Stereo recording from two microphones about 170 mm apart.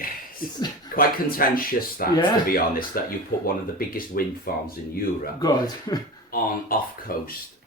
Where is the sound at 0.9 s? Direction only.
60° left (ahead or behind).